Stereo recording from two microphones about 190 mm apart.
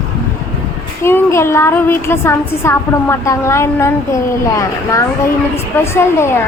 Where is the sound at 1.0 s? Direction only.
15° left (ahead or behind).